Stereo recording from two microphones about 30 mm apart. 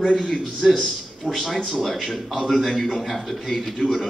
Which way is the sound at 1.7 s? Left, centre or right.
Centre.